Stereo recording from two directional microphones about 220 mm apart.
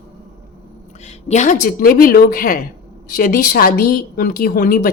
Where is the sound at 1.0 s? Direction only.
30° left (ahead or behind).